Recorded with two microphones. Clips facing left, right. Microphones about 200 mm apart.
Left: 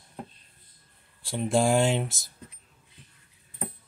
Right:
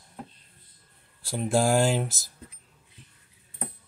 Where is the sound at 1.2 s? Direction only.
Centre (ahead or behind).